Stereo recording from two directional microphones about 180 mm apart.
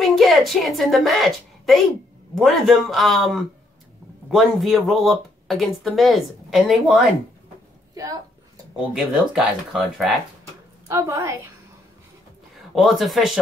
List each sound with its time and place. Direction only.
0.0 s a woman's voice: centre (ahead or behind)
8.9 s speech: 5° right (ahead or behind)
10.9 s a woman's voice: 15° right (ahead or behind)
12.7 s speech: centre (ahead or behind)